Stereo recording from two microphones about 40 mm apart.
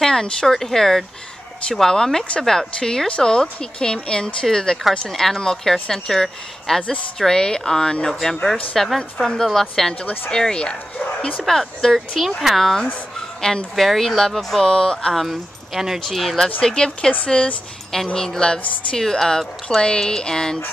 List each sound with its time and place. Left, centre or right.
0.0 s a woman's voice: centre
6.8 s speech: left
7.2 s a woman's voice: centre
8.1 s a woman's voice: centre
10.3 s speech: left
11.4 s a woman's voice: centre
15.1 s speech: centre
16.6 s a woman's voice: centre